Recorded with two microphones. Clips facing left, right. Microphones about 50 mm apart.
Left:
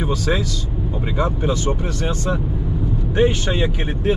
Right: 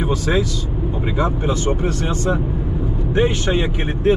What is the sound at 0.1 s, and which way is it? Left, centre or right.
Speech, centre.